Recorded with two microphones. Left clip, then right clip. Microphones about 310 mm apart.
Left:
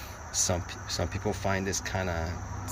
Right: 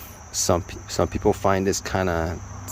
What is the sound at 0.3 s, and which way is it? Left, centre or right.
Speech, centre.